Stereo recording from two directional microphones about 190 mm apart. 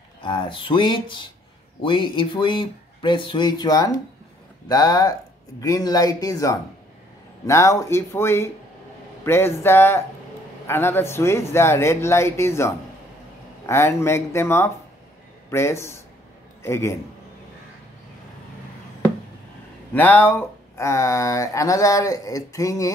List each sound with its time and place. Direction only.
0.2 s speech: 25° left (ahead or behind)
19.9 s speech: 10° left (ahead or behind)